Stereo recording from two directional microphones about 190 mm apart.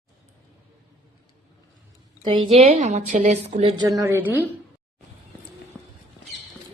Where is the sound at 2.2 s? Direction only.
25° right (ahead or behind).